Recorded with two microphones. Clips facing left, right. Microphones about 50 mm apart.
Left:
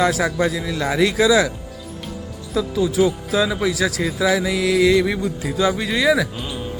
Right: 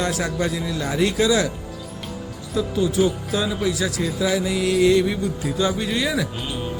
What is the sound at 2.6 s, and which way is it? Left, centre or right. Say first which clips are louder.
Speech: left 2 dB; left.